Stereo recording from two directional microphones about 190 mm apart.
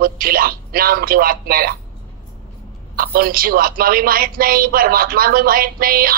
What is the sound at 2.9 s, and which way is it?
A woman's voice, 50° right (ahead or behind).